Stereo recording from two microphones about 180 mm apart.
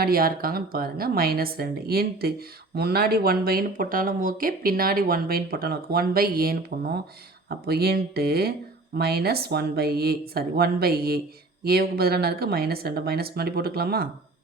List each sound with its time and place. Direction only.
0.0 s speech: 55° right (ahead or behind)